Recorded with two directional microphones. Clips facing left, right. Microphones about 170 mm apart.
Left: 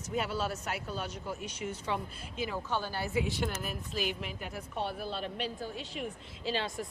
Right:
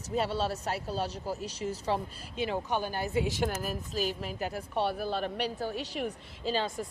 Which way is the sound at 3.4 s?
40° right (ahead or behind).